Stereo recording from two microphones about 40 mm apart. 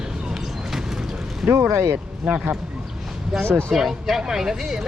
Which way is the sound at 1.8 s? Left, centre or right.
Right.